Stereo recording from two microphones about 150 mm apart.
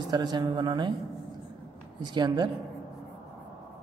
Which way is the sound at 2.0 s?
30° right (ahead or behind).